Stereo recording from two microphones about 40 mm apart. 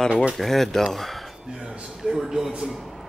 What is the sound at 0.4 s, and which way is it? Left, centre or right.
Speech, centre.